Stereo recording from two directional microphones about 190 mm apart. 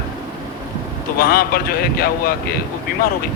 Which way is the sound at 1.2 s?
50° left (ahead or behind).